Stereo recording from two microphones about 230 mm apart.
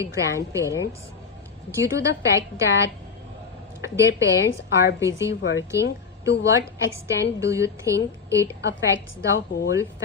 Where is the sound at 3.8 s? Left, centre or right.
Centre.